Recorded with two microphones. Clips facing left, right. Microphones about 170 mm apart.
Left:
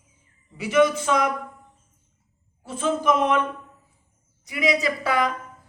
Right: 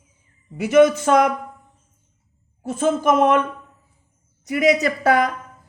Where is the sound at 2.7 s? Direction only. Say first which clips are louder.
Right 4 dB; 45° right (ahead or behind).